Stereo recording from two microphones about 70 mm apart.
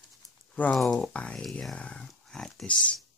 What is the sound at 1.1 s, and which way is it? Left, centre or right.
Speech, centre.